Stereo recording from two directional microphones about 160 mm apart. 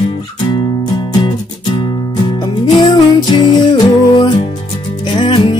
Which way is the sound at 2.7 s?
30° left (ahead or behind).